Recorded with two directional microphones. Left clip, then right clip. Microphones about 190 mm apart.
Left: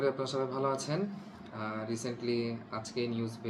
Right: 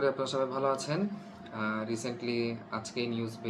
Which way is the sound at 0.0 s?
10° right (ahead or behind).